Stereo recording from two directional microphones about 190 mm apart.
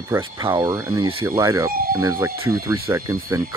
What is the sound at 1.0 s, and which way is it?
Speech, 30° right (ahead or behind).